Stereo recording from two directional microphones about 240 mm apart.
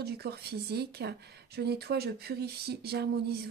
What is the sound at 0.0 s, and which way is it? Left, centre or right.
A woman's voice, right.